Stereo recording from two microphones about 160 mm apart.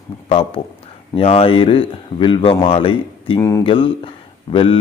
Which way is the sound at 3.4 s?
20° left (ahead or behind).